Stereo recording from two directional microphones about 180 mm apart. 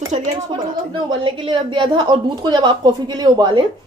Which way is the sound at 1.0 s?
25° right (ahead or behind).